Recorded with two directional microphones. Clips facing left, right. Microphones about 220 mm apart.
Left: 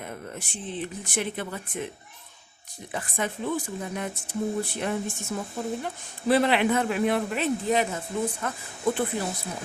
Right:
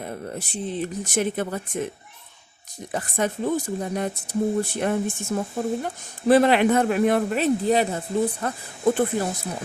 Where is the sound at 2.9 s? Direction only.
40° right (ahead or behind).